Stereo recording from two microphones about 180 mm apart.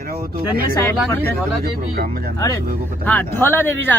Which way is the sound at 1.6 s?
55° right (ahead or behind).